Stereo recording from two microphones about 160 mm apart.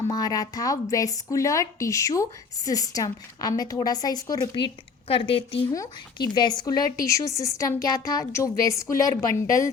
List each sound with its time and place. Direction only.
0.1 s speech: 25° left (ahead or behind)
5.7 s speech: 20° left (ahead or behind)